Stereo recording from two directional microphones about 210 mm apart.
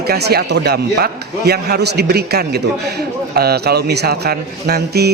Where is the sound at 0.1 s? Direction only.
50° right (ahead or behind).